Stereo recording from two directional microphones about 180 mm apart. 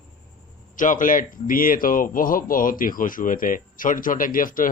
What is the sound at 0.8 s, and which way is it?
Speech, 45° left (ahead or behind).